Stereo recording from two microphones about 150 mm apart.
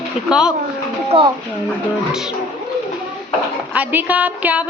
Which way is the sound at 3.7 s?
10° right (ahead or behind).